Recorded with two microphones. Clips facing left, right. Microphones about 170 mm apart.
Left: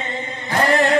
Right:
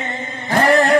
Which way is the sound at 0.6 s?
45° right (ahead or behind).